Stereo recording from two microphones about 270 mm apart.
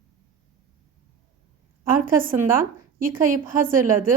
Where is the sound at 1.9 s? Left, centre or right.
Right.